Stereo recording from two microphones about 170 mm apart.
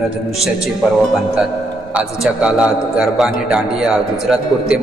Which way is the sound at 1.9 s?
5° right (ahead or behind).